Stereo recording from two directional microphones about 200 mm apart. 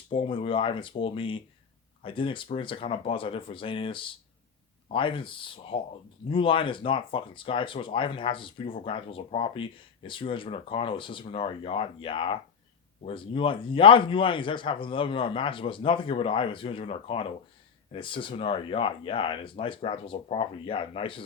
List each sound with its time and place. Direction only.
0.1 s speech: 25° left (ahead or behind)